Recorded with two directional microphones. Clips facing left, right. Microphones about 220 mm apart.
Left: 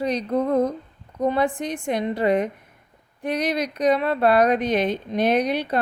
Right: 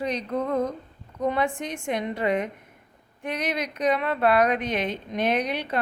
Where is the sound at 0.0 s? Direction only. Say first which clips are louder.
Left 5 dB; 35° left (ahead or behind).